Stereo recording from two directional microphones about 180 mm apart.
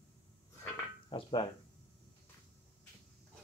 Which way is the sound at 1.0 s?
30° left (ahead or behind).